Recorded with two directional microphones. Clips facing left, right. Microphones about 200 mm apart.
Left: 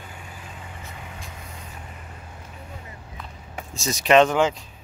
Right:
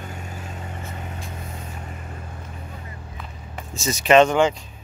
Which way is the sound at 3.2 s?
Centre (ahead or behind).